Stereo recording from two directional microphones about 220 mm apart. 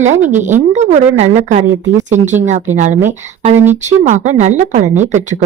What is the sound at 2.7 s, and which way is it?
Speech, 35° right (ahead or behind).